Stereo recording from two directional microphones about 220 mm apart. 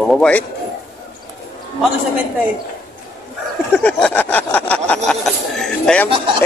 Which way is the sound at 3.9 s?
5° left (ahead or behind).